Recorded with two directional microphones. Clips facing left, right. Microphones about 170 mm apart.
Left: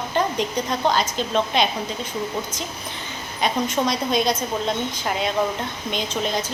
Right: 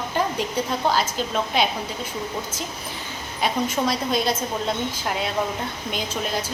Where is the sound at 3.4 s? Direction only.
5° right (ahead or behind).